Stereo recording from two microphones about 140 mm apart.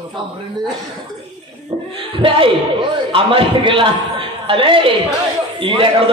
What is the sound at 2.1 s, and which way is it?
A man's voice, 40° right (ahead or behind).